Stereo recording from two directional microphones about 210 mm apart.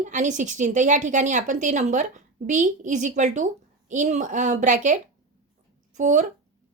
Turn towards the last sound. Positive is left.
turn(degrees=-35)  # may be behind; listen again after turning